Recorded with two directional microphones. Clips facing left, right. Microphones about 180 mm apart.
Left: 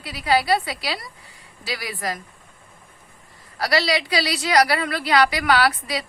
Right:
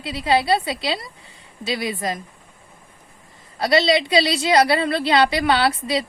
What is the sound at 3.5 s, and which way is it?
A woman's voice, 25° right (ahead or behind).